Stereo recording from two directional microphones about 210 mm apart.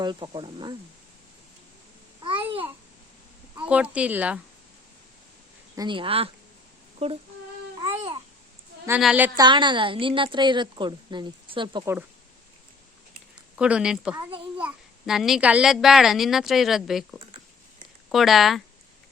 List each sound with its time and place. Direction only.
0.0 s a woman's voice: 20° right (ahead or behind)
2.2 s babbling: 25° right (ahead or behind)
3.6 s speech: 5° right (ahead or behind)
5.7 s a woman's voice: 20° right (ahead or behind)
7.9 s babbling: 30° right (ahead or behind)
8.9 s speech: 5° right (ahead or behind)
9.4 s a woman's voice: 20° right (ahead or behind)
13.6 s a child's voice: 5° right (ahead or behind)